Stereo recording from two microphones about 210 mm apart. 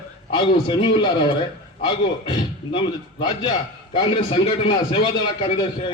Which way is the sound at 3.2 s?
20° left (ahead or behind).